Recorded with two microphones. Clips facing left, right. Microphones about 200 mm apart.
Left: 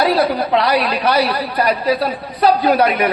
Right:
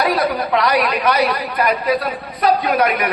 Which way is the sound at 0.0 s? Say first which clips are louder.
Left 3 dB; 30° left (ahead or behind).